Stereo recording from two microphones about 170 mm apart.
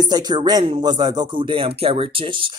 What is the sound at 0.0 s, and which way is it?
Speech, 25° right (ahead or behind).